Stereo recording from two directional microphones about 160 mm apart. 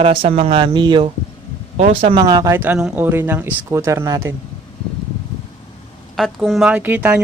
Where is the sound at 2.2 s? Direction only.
20° right (ahead or behind).